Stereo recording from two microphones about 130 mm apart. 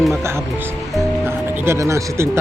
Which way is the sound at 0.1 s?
20° right (ahead or behind).